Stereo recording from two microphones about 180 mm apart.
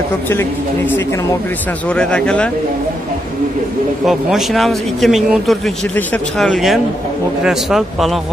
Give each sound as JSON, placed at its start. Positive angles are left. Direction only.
{"t": 0.3, "sound": "speech", "side_deg": 15}
{"t": 4.0, "sound": "speech", "side_deg": 0}